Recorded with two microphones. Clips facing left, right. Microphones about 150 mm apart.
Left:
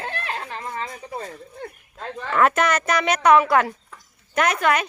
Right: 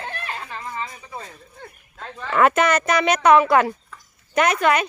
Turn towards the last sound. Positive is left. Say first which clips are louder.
# right 2 dB
turn(degrees=0)  # may be behind; listen again after turning